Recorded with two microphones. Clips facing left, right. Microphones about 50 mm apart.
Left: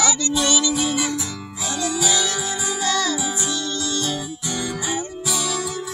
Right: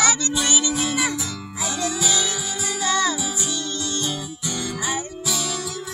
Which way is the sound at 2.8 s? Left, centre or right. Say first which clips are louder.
Right 1 dB; centre.